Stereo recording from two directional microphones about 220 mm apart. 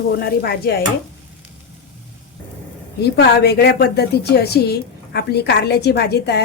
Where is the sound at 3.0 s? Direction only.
50° left (ahead or behind).